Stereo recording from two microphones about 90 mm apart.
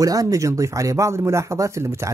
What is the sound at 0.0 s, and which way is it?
Speech, 40° right (ahead or behind).